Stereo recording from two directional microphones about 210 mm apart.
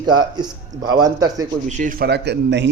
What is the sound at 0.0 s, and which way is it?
A man's voice, 20° right (ahead or behind).